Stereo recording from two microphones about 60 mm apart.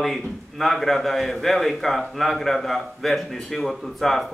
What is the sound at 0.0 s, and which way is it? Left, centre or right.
A man's voice, centre.